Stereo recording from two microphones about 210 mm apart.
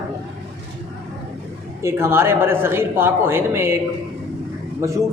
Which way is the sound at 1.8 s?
10° right (ahead or behind).